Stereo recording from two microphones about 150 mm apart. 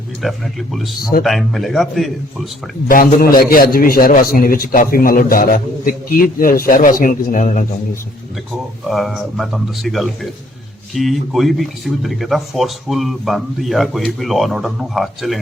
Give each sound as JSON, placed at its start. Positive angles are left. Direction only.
{"t": 0.2, "sound": "speech", "side_deg": 0}
{"t": 2.9, "sound": "a man's voice", "side_deg": 70}
{"t": 8.8, "sound": "speech", "side_deg": 0}